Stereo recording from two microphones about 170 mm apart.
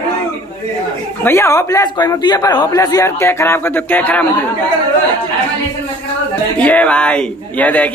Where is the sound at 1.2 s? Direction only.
15° left (ahead or behind).